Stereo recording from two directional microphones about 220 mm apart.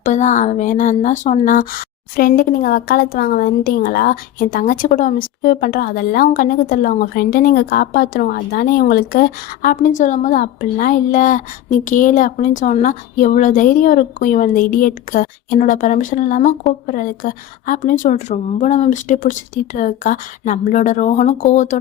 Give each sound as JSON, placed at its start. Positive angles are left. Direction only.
{"t": 0.0, "sound": "a woman's voice", "side_deg": 35}